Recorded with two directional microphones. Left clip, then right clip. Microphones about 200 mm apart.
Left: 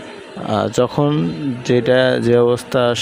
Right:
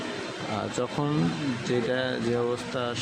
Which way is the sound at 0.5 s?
40° left (ahead or behind).